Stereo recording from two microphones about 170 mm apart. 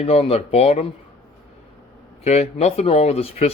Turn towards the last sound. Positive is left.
turn(degrees=35)  # may be behind; listen again after turning